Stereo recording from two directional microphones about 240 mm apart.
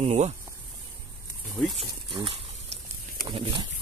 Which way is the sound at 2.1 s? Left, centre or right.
Right.